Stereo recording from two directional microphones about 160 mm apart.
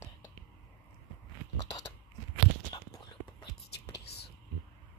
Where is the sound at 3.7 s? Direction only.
90° left.